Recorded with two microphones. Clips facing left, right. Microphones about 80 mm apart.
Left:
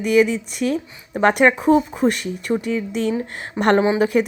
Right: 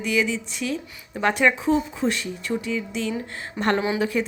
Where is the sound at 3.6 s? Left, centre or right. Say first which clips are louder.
Left 6 dB; left.